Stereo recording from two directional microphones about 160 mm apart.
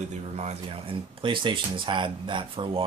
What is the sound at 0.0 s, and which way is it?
Speech, 45° right (ahead or behind).